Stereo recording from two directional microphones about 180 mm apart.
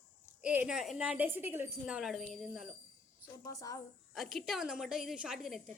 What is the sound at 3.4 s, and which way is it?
Speech, 20° left (ahead or behind).